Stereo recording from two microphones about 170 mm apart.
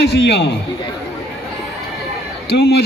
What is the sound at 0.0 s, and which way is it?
Speech, 75° left (ahead or behind).